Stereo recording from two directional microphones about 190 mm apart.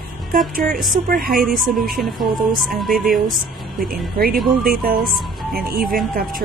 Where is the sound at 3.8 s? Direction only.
50° right (ahead or behind).